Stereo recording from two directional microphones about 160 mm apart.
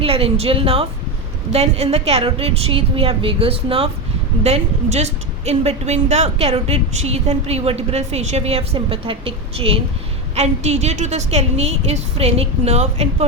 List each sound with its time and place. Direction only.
0.0 s a woman's voice: 35° right (ahead or behind)